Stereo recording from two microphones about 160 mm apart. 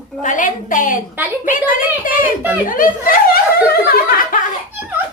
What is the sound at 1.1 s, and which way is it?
Speech, 10° right (ahead or behind).